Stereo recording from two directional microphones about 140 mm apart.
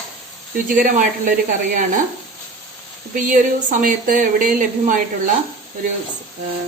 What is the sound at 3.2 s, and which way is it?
A woman's voice, 70° right (ahead or behind).